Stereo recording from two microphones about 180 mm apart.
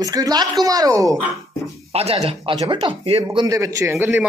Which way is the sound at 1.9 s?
35° right (ahead or behind).